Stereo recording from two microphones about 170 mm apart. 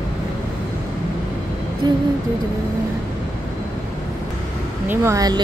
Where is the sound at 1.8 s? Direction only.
25° right (ahead or behind).